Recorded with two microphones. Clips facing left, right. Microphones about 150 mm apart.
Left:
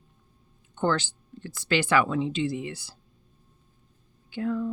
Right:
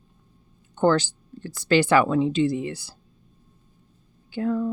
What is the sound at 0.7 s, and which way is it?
Speech, 40° right (ahead or behind).